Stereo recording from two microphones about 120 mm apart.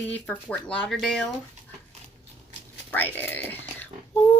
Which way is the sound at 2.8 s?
15° left (ahead or behind).